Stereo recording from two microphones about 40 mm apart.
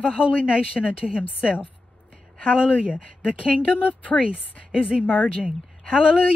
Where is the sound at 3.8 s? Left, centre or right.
Left.